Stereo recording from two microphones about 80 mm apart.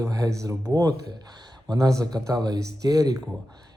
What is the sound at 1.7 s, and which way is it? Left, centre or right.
Speech, right.